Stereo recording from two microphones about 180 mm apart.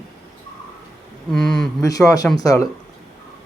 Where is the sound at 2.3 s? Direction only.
20° left (ahead or behind).